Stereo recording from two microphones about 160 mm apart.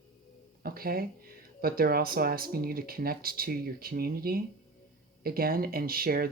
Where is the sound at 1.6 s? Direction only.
70° right (ahead or behind).